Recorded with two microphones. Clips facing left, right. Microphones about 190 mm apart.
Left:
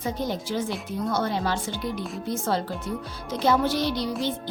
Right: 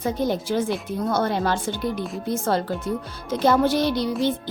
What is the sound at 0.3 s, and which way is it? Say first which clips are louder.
Speech: right 5 dB; 55° right (ahead or behind).